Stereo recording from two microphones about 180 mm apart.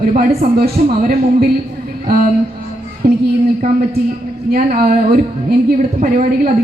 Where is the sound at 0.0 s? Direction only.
55° right (ahead or behind).